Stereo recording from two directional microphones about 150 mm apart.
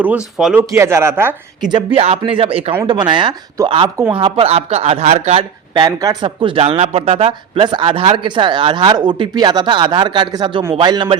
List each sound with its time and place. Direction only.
0.3 s speech: 5° right (ahead or behind)
0.7 s speech: 20° right (ahead or behind)
1.7 s speech: 40° right (ahead or behind)
5.8 s speech: 25° right (ahead or behind)